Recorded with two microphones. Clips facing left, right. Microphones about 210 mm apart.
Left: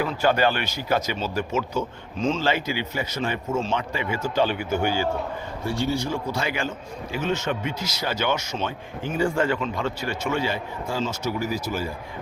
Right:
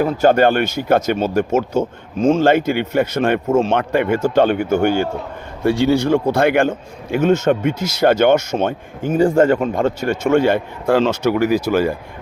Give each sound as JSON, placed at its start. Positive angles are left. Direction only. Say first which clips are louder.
{"t": 0.0, "sound": "a man's voice", "louder": "right 8 dB", "side_deg": -45}
{"t": 5.6, "sound": "a man's voice", "louder": "right 11 dB", "side_deg": -80}